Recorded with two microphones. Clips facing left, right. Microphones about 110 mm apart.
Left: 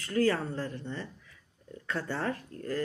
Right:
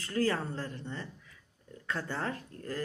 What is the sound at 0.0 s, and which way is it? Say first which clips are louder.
Speech: left 3 dB; 35° right (ahead or behind).